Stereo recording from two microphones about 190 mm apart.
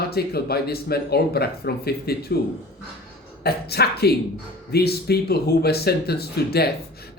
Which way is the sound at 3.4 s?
55° left (ahead or behind).